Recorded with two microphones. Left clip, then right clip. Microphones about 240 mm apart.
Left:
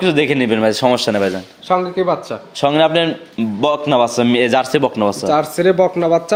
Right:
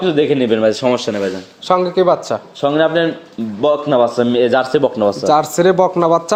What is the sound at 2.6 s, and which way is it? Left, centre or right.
A man's voice, left.